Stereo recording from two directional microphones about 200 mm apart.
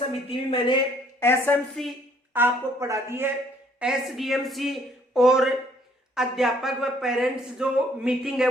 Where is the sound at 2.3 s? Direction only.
10° right (ahead or behind).